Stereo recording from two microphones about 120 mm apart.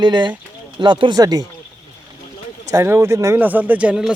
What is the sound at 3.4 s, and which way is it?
Speech, 15° right (ahead or behind).